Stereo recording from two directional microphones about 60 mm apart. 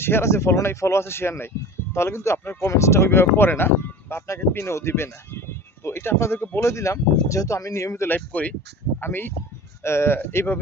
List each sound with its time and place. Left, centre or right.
0.0 s speech: left
8.0 s speech: left
9.0 s speech: left